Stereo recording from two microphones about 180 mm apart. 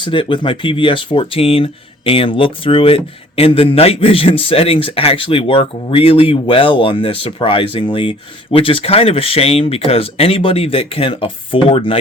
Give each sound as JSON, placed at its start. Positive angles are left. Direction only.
{"t": 0.0, "sound": "speech", "side_deg": 25}